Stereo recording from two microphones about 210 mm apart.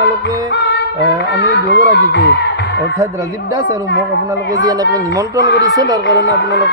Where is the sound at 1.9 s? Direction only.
55° left (ahead or behind).